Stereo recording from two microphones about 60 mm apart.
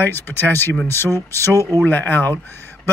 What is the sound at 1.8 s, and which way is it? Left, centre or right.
Speech, left.